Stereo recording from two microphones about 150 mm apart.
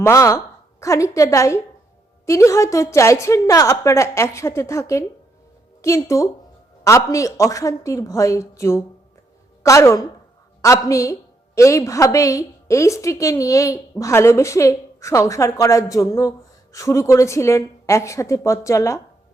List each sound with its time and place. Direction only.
0.0 s a woman's voice: 20° left (ahead or behind)